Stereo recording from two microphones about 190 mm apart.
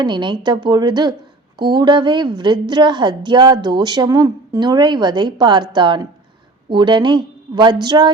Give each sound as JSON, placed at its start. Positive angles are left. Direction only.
{"t": 0.0, "sound": "a woman's voice", "side_deg": -25}